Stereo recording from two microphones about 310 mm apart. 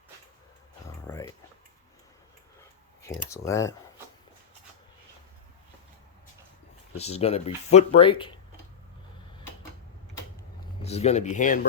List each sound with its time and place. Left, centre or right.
1.0 s a sound: centre
3.2 s speech: centre
6.9 s speech: centre
10.8 s speech: left